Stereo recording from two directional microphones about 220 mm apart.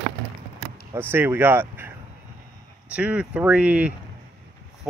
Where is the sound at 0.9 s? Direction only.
10° right (ahead or behind).